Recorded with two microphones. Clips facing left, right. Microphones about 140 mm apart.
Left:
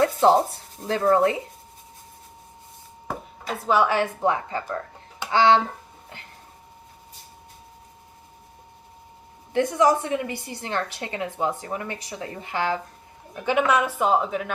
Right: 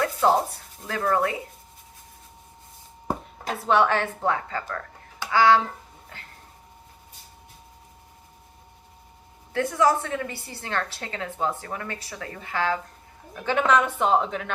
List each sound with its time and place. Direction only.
0.0 s a sound: 25° left (ahead or behind)
0.8 s speech: 30° left (ahead or behind)
3.7 s a woman's voice: 5° left (ahead or behind)
9.5 s a woman's voice: 20° left (ahead or behind)